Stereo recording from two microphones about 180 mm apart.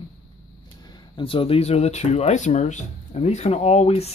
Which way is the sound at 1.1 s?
30° left (ahead or behind).